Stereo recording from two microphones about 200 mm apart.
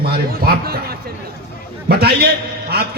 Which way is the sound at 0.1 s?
50° right (ahead or behind).